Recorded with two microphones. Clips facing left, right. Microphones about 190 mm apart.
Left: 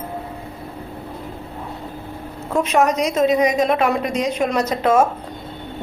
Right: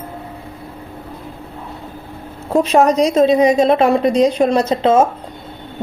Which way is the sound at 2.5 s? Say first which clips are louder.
Right 5 dB; 35° right (ahead or behind).